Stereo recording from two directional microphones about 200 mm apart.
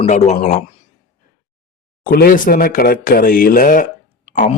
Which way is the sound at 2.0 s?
50° left (ahead or behind).